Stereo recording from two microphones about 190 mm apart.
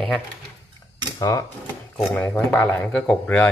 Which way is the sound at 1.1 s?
15° left (ahead or behind).